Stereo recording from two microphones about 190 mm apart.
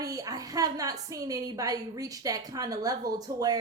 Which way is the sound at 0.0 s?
20° right (ahead or behind).